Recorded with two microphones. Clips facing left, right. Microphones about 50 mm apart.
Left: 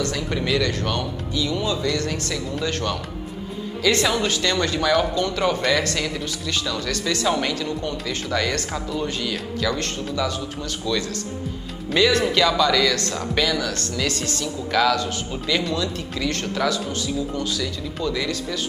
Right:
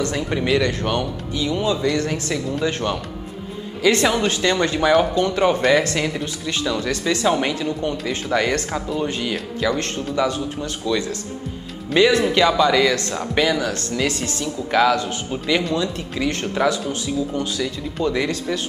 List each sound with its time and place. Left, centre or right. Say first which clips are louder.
0.0 s speech: right 3 dB; right
8.7 s speech: right 3 dB; centre
18.0 s speech: right 4 dB; right